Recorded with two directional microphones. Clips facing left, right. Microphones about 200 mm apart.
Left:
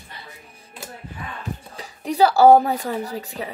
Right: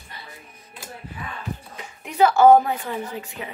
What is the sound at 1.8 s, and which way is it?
A woman's voice, 35° left (ahead or behind).